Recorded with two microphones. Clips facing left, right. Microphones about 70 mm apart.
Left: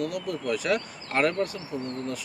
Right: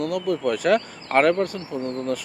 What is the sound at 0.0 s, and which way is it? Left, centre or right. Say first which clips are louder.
Speech: right 7 dB; right.